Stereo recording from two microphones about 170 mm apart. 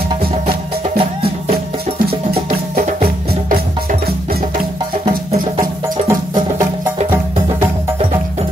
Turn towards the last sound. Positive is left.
turn(degrees=-20)  # may be behind; listen again after turning